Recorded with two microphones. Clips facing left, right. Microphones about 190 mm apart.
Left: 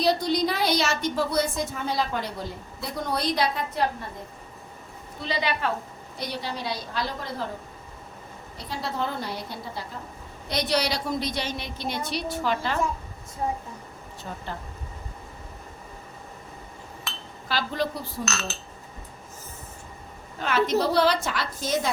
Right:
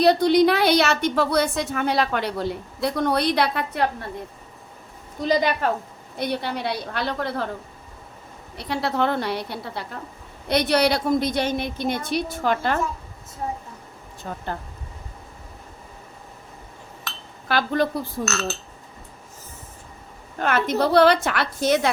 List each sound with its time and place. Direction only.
0.0 s a woman's voice: 60° right (ahead or behind)
5.2 s a woman's voice: 45° right (ahead or behind)
6.1 s a woman's voice: 55° right (ahead or behind)
8.5 s a woman's voice: 70° right (ahead or behind)
10.5 s a woman's voice: 55° right (ahead or behind)
14.3 s a woman's voice: 50° right (ahead or behind)
17.5 s a woman's voice: 55° right (ahead or behind)
20.4 s a woman's voice: 55° right (ahead or behind)